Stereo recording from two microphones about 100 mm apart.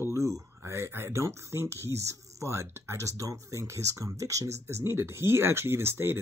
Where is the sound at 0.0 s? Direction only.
30° right (ahead or behind).